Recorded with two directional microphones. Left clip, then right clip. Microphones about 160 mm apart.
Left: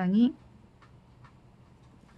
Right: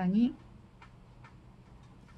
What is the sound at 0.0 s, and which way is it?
Speech, 15° left (ahead or behind).